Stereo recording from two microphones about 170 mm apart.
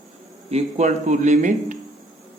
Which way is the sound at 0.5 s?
45° right (ahead or behind).